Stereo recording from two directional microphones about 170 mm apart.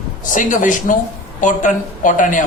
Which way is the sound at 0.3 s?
50° left (ahead or behind).